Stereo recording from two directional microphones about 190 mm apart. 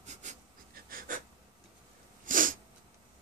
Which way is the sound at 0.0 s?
40° right (ahead or behind).